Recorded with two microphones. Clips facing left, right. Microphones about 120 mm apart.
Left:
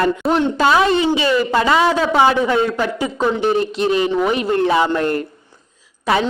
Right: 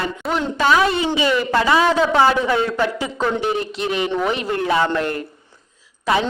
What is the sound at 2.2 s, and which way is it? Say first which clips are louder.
Speech: left 2 dB; 20° left (ahead or behind).